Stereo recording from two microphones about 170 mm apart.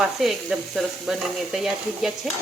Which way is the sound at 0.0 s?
Centre (ahead or behind).